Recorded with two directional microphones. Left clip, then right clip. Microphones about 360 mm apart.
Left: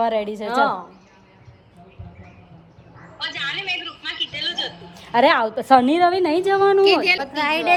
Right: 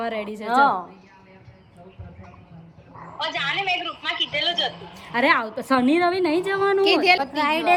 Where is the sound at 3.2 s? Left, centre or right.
Centre.